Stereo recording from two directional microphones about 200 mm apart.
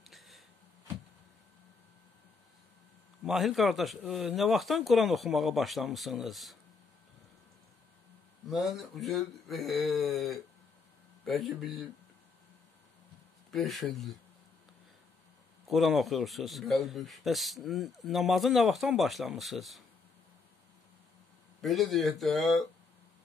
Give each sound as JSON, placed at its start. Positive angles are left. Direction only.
{"t": 3.3, "sound": "speech", "side_deg": 0}
{"t": 8.5, "sound": "speech", "side_deg": 0}
{"t": 13.5, "sound": "speech", "side_deg": 0}
{"t": 15.6, "sound": "speech", "side_deg": 0}
{"t": 21.5, "sound": "speech", "side_deg": 0}